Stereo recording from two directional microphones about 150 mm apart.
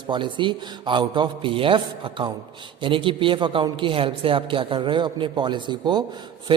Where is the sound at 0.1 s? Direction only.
35° right (ahead or behind).